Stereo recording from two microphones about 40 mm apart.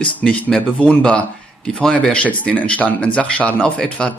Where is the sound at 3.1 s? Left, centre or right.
Left.